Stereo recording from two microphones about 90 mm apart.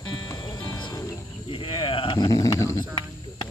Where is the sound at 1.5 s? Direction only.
75° left (ahead or behind).